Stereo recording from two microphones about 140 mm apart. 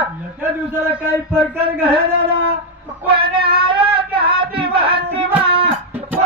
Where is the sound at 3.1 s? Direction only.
40° right (ahead or behind).